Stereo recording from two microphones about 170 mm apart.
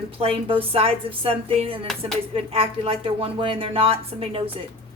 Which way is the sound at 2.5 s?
35° right (ahead or behind).